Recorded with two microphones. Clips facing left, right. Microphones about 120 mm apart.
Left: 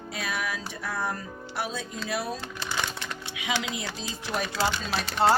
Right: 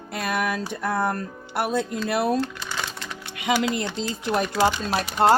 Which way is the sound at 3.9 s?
60° right (ahead or behind).